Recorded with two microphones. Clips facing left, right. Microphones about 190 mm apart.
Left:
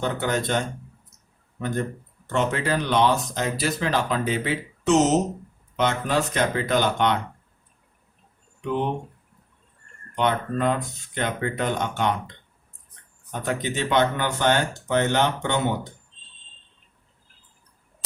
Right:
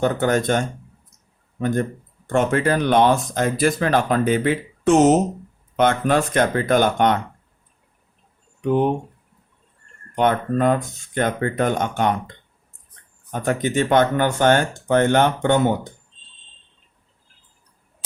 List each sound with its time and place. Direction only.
0.0 s speech: 50° right (ahead or behind)
8.6 s speech: 45° right (ahead or behind)
10.2 s speech: 50° right (ahead or behind)